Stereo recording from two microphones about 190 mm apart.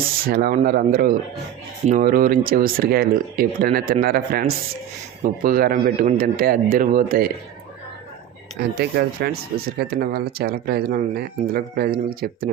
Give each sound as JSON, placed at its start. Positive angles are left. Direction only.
{"t": 0.3, "sound": "speech", "side_deg": -50}
{"t": 8.5, "sound": "speech", "side_deg": -55}